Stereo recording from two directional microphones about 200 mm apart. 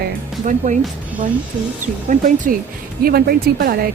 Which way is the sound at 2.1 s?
40° right (ahead or behind).